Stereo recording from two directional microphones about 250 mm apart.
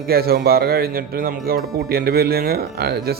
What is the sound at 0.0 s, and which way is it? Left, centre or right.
A man's voice, right.